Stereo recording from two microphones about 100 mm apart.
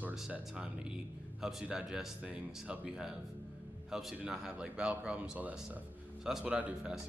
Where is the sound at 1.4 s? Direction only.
5° right (ahead or behind).